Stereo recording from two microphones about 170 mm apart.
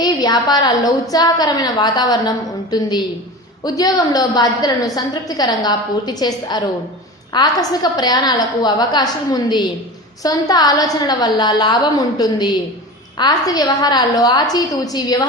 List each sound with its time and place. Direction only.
0.0 s a woman's voice: 25° left (ahead or behind)